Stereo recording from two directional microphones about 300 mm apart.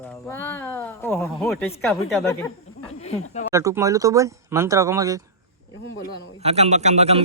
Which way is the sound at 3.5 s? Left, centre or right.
Centre.